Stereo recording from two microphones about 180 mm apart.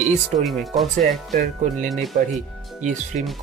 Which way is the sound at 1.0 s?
45° right (ahead or behind).